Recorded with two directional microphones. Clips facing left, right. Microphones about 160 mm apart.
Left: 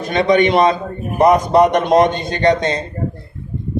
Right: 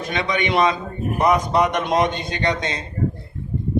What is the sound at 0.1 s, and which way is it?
A man's voice, 35° left (ahead or behind).